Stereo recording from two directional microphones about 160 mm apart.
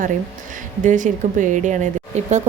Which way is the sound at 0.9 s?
55° right (ahead or behind).